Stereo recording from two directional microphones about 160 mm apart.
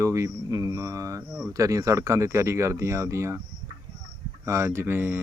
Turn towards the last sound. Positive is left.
turn(degrees=-15)  # may be behind; listen again after turning